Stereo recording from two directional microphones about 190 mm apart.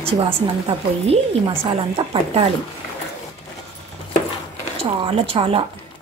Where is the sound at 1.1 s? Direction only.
30° right (ahead or behind).